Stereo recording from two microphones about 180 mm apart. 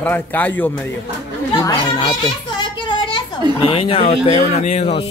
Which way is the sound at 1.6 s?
20° left (ahead or behind).